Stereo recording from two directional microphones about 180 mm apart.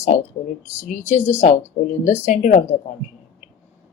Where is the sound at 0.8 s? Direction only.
40° left (ahead or behind).